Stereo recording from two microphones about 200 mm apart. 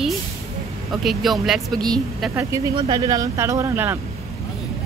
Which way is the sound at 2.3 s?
15° right (ahead or behind).